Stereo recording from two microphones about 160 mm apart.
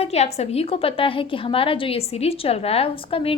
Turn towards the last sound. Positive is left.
turn(degrees=35)  # may be behind; listen again after turning